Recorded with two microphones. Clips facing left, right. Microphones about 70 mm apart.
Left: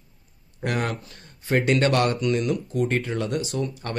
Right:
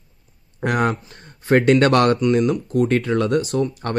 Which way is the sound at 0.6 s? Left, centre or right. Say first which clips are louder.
Right 7 dB; right.